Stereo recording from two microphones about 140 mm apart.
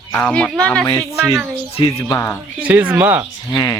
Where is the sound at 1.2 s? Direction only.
15° right (ahead or behind).